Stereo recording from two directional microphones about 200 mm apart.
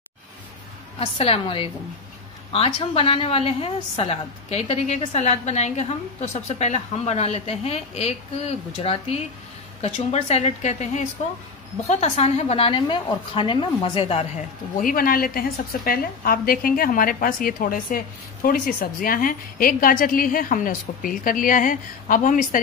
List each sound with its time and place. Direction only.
0.9 s a woman's voice: 30° left (ahead or behind)
14.8 s a woman's voice: 45° left (ahead or behind)